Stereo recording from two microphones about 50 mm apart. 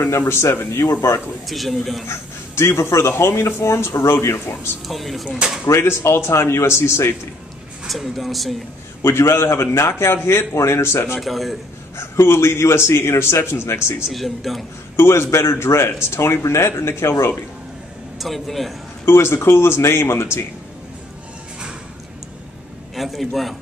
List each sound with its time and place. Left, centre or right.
0.2 s speech: left
1.5 s speech: centre
2.0 s speech: left
4.8 s speech: centre
5.7 s speech: left
7.8 s speech: centre
9.0 s speech: left
11.1 s speech: centre
12.0 s speech: left
14.1 s speech: centre
15.0 s speech: left
18.2 s speech: centre
19.0 s speech: left
22.9 s a man's voice: centre